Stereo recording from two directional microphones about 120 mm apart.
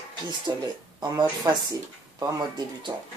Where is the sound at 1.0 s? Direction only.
35° right (ahead or behind).